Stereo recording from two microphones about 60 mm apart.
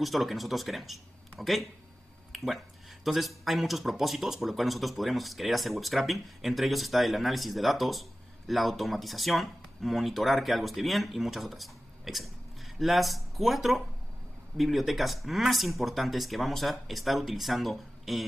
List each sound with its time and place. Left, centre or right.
0.0 s speech: centre